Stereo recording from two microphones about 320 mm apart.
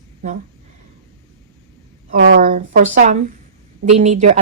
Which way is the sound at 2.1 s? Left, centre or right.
Right.